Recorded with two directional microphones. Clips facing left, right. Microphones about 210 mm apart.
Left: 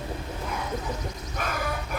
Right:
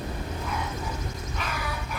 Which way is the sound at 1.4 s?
50° left (ahead or behind).